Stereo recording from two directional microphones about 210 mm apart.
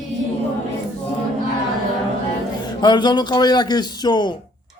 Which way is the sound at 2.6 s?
20° left (ahead or behind).